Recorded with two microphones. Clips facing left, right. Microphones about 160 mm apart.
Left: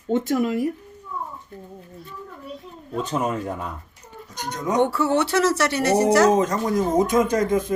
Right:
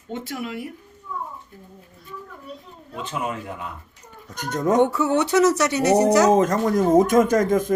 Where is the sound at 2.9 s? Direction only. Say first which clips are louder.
Left 4 dB; 40° left (ahead or behind).